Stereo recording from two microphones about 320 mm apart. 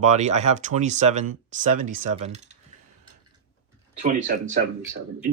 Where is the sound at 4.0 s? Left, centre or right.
Right.